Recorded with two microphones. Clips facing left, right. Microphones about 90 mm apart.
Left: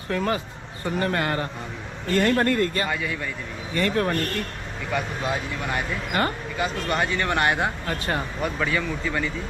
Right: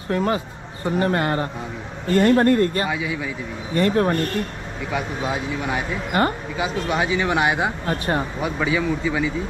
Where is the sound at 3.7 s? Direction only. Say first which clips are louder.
Right 5 dB; 30° right (ahead or behind).